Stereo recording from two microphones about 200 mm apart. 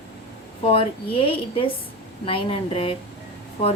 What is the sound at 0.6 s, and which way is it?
Speech, 25° left (ahead or behind).